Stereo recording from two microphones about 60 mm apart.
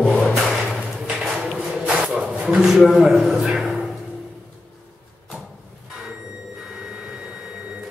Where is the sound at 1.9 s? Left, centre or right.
Centre.